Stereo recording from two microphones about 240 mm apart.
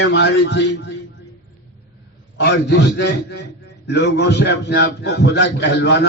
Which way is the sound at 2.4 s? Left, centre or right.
Left.